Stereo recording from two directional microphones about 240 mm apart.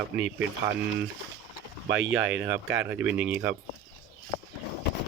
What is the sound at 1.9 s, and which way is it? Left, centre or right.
Speech, right.